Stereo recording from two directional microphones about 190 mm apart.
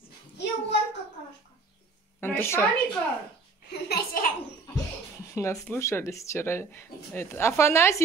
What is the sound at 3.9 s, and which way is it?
Speech, 50° left (ahead or behind).